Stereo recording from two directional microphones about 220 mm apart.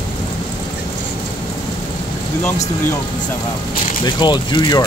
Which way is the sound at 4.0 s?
20° left (ahead or behind).